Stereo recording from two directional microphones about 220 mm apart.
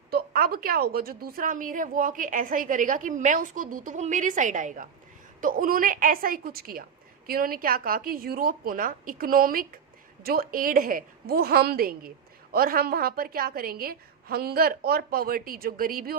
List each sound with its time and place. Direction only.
0.1 s a woman's voice: 40° right (ahead or behind)